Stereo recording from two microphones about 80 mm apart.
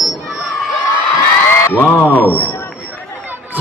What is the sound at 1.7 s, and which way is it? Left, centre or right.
Speech, left.